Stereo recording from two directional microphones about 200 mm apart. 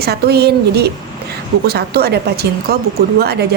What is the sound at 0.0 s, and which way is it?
A woman's voice, 50° right (ahead or behind).